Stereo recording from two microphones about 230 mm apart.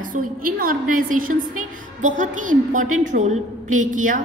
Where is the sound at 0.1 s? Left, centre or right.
Right.